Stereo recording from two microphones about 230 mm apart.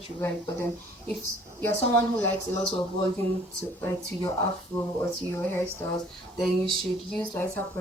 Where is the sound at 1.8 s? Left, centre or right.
Right.